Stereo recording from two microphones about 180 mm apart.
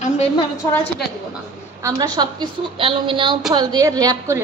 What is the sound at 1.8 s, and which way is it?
A woman's voice, 20° right (ahead or behind).